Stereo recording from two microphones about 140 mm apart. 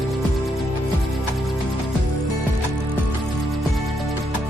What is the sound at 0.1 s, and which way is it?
Music, centre (ahead or behind).